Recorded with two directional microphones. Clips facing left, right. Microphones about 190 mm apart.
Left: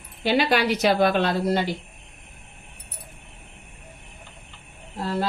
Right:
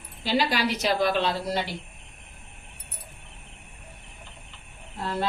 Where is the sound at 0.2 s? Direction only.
60° left (ahead or behind).